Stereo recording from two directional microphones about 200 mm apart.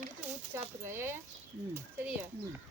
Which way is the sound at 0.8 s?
10° right (ahead or behind).